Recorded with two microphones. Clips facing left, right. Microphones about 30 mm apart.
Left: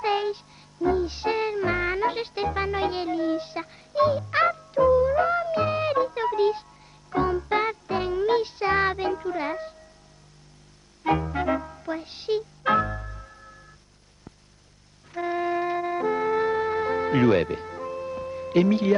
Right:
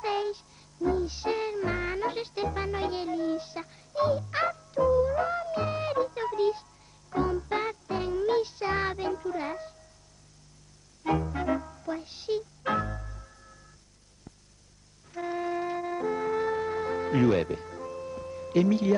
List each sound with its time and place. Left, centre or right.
0.0 s music: left
11.1 s music: left
15.1 s music: left